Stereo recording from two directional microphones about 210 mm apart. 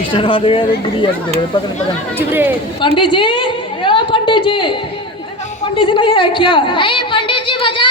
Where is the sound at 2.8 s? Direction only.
25° left (ahead or behind).